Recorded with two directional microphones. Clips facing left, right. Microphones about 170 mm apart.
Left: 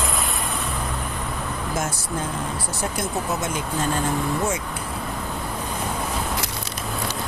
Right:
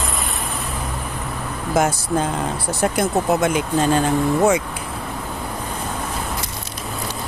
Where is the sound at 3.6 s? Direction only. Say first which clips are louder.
Right 7 dB; 85° right.